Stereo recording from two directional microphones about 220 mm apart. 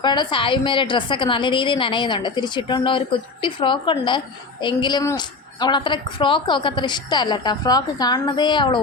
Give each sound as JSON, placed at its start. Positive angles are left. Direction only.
{"t": 0.0, "sound": "a woman's voice", "side_deg": 20}